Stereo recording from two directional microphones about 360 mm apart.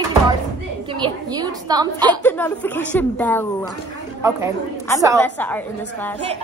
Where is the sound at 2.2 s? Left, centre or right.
Centre.